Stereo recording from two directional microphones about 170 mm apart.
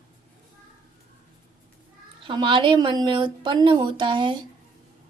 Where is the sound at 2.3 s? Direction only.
30° right (ahead or behind).